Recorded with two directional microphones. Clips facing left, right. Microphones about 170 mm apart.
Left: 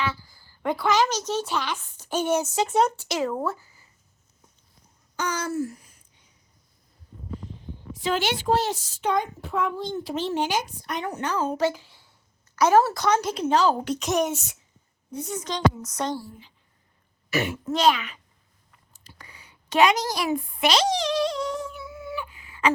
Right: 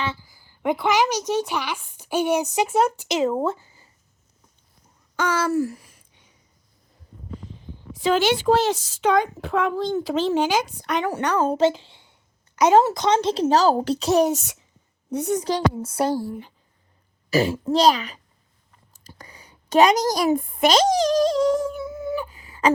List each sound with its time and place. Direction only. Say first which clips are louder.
0.0 s a sound: even; 25° right (ahead or behind)
0.3 s a woman's voice: right 4 dB; 15° right (ahead or behind)
5.1 s a sound: right 6 dB; 90° right
8.5 s speech: right 4 dB; 90° right; by 11.4 s 70° right (ahead or behind)
11.5 s a child's voice: right 5 dB; 25° right (ahead or behind)
15.1 s a woman's voice: right 9 dB; 70° right (ahead or behind)
15.4 s speech: right 2 dB; 35° right (ahead or behind)
16.2 s speech: right 13 dB; 65° right (ahead or behind)
17.3 s a child's voice: right 6 dB; 35° right (ahead or behind)
18.9 s a sound: right 5 dB; 40° right (ahead or behind)